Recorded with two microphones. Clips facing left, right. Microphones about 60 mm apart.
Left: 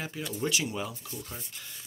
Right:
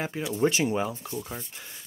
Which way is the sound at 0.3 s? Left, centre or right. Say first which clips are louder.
Right 7 dB; right.